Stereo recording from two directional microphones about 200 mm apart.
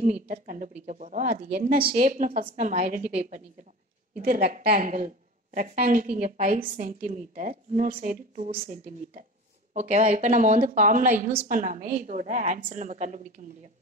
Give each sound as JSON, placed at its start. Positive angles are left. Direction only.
{"t": 0.0, "sound": "a woman's voice", "side_deg": -35}
{"t": 4.2, "sound": "a woman's voice", "side_deg": -50}